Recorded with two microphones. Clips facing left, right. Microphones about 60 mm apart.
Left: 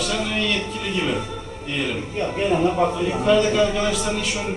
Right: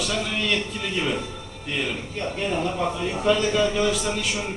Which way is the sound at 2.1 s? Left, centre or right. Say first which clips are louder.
Left 6 dB; left.